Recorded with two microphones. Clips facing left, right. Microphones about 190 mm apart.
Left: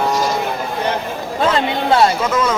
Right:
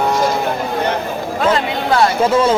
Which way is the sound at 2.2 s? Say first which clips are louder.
Right 5 dB; 30° right (ahead or behind).